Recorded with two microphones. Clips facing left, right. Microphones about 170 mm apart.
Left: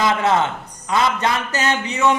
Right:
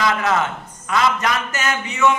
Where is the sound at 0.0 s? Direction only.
25° left (ahead or behind).